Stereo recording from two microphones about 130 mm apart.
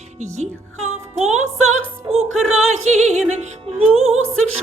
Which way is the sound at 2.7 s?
60° right (ahead or behind).